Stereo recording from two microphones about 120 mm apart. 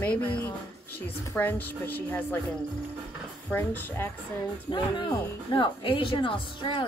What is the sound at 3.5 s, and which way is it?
Speech, 15° left (ahead or behind).